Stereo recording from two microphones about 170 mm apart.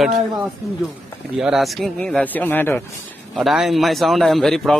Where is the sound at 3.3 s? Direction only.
Centre (ahead or behind).